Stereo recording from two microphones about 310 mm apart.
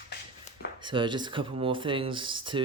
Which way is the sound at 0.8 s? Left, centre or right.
Centre.